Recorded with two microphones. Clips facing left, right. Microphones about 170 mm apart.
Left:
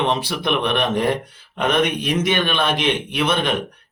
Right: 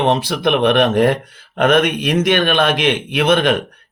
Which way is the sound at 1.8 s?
80° right.